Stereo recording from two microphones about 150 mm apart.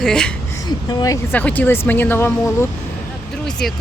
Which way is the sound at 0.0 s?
5° left (ahead or behind).